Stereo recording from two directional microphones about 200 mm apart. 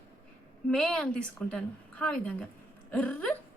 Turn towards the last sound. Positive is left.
turn(degrees=5)  # may be behind; listen again after turning